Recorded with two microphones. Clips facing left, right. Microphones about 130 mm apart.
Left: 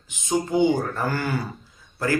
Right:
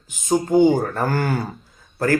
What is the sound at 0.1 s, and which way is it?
Speech, 45° right (ahead or behind).